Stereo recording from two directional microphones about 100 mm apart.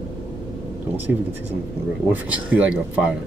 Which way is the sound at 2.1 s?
15° right (ahead or behind).